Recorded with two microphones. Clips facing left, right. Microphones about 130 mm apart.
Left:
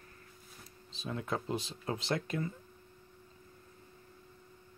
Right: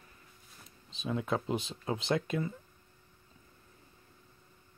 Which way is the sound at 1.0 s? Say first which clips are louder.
Right 4 dB; 20° right (ahead or behind).